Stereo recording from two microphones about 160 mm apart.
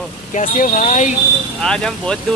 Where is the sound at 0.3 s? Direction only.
55° left (ahead or behind).